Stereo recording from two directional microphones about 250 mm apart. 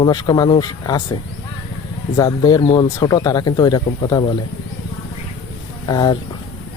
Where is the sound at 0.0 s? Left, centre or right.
Centre.